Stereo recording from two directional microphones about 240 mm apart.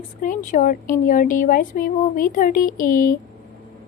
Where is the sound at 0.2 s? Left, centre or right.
Left.